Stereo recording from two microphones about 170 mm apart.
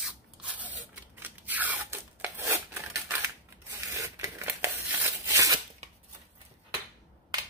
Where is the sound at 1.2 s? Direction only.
10° right (ahead or behind).